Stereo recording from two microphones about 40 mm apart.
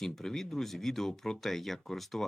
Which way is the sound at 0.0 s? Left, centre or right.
Centre.